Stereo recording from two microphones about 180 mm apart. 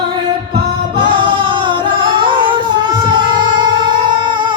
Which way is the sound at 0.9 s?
25° right (ahead or behind).